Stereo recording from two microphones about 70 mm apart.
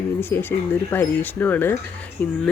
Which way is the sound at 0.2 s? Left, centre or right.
Left.